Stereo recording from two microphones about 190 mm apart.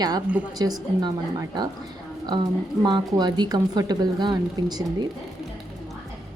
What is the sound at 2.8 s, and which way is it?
Speech, 20° right (ahead or behind).